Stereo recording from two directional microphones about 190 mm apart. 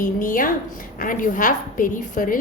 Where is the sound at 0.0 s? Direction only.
45° left (ahead or behind).